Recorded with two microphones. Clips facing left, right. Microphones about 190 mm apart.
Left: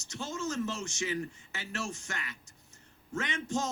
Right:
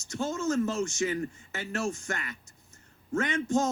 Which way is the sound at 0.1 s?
50° right (ahead or behind).